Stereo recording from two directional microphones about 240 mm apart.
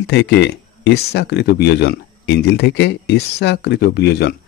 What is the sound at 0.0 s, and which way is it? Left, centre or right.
Speech, left.